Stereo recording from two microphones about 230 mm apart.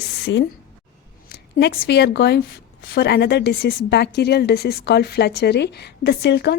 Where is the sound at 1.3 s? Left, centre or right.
Left.